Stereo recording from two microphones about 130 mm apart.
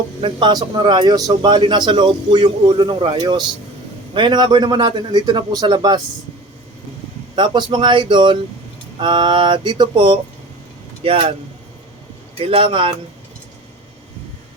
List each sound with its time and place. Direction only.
0.2 s a man's voice: 40° right (ahead or behind)
7.3 s a man's voice: 35° right (ahead or behind)
12.4 s a man's voice: 40° right (ahead or behind)